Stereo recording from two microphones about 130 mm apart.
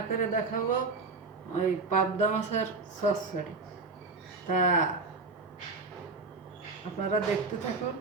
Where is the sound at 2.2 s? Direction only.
65° left (ahead or behind).